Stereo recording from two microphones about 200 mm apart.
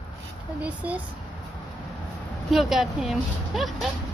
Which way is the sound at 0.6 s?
5° right (ahead or behind).